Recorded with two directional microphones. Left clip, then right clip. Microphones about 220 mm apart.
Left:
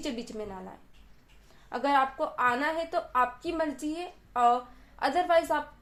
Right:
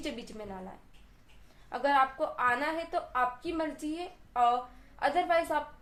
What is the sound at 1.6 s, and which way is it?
A woman's voice, 30° left (ahead or behind).